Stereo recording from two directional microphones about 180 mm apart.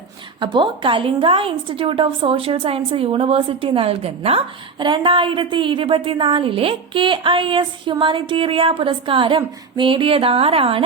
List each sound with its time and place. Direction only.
0.3 s a woman's voice: 25° right (ahead or behind)